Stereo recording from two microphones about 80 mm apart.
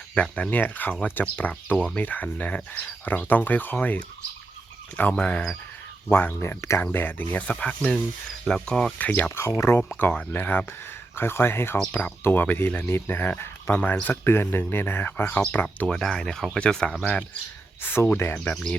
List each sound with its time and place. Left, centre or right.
0.1 s speech: centre
5.1 s speech: centre
6.1 s speech: left
6.6 s speech: left
6.8 s speech: left; by 8.9 s centre
9.0 s speech: centre
9.3 s speech: left
10.0 s speech: centre
11.9 s speech: centre
15.9 s speech: centre
17.8 s speech: left